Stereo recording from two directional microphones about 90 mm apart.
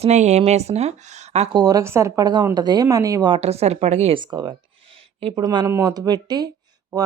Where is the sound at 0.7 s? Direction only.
65° right (ahead or behind).